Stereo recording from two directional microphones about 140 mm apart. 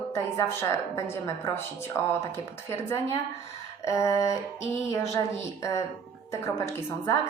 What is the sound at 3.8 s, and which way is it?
A woman's voice, 20° left (ahead or behind).